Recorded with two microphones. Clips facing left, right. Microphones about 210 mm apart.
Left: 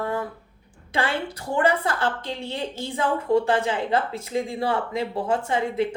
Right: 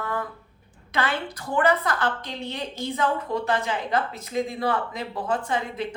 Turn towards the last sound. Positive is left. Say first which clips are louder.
# left 4 dB
turn(degrees=25)  # may be behind; listen again after turning